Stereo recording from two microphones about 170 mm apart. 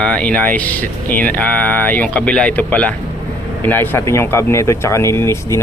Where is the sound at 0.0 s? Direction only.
5° left (ahead or behind).